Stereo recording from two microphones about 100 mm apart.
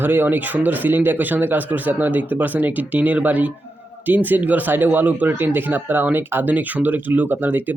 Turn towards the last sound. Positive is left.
turn(degrees=-20)  # may be behind; listen again after turning